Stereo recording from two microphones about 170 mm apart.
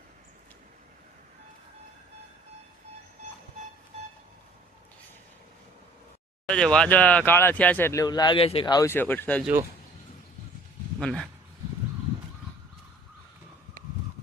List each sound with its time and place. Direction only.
6.5 s speech: 5° left (ahead or behind)
8.0 s speech: 25° left (ahead or behind)
11.0 s speech: 5° left (ahead or behind)